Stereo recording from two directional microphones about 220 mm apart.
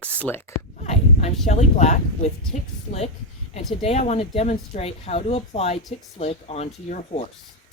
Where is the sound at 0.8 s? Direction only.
30° left (ahead or behind).